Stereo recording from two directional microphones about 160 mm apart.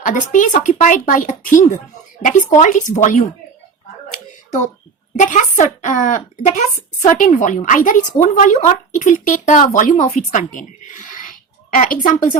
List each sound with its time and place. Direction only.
0.0 s speech: 55° left (ahead or behind)
5.1 s speech: 50° left (ahead or behind)
11.8 s a woman's voice: 55° left (ahead or behind)